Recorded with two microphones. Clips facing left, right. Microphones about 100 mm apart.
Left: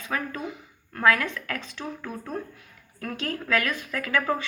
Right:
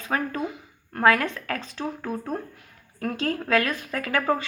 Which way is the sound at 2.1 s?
25° right (ahead or behind).